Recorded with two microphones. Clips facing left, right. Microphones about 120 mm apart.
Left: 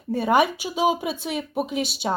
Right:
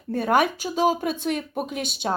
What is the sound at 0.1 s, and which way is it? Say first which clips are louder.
A woman's voice: left 1 dB; 5° left (ahead or behind).